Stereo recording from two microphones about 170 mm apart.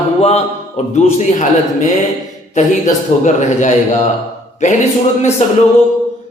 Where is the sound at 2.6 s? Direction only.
45° left (ahead or behind).